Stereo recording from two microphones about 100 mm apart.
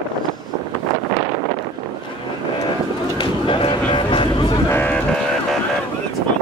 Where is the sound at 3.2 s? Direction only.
60° left (ahead or behind).